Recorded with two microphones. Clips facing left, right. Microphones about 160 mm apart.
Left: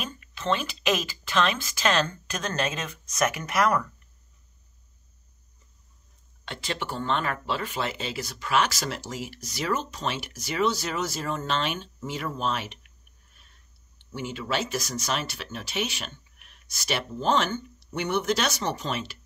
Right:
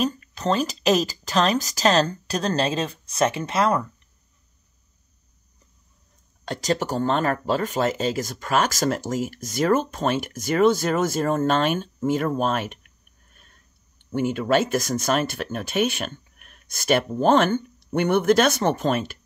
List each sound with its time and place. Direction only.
0.0 s speech: 40° right (ahead or behind)
6.4 s speech: 40° right (ahead or behind)